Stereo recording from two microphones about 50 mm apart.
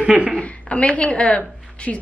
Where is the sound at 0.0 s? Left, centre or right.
Right.